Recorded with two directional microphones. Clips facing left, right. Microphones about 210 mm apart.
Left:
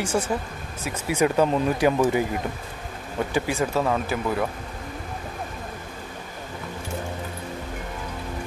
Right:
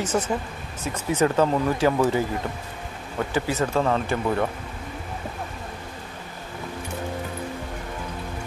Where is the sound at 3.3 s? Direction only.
15° left (ahead or behind).